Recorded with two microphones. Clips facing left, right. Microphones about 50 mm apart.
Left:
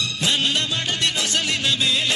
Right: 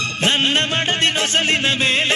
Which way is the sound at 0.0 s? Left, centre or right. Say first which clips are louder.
Right 4 dB; right.